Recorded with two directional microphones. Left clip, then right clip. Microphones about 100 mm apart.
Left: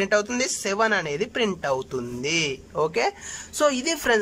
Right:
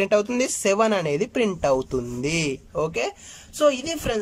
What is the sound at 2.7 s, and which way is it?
Speech, 30° right (ahead or behind).